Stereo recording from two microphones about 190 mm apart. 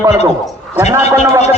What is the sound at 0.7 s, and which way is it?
Speech, 15° right (ahead or behind).